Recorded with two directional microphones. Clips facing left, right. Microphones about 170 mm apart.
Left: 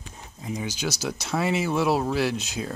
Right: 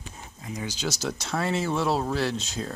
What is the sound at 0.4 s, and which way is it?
Speech, 20° left (ahead or behind).